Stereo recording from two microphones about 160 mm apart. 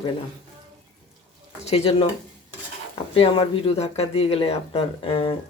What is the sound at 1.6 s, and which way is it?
Speech, 40° left (ahead or behind).